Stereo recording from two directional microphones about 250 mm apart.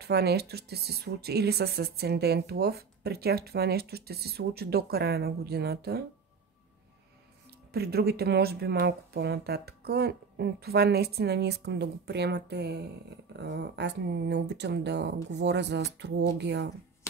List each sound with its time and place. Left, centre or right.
0.0 s speech: right
7.7 s speech: right